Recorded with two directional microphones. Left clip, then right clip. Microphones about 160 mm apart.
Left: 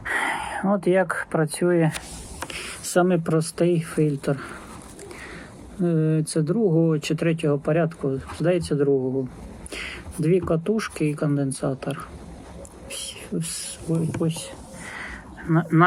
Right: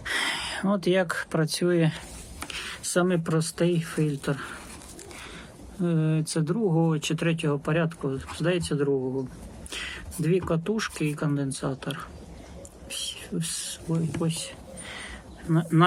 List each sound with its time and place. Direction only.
0.0 s speech: 20° right (ahead or behind)
2.8 s speech: 20° left (ahead or behind)
5.8 s speech: 10° left (ahead or behind)
12.9 s a sound: 10° left (ahead or behind)
13.9 s speech: 10° left (ahead or behind)
14.9 s a sound: 15° right (ahead or behind)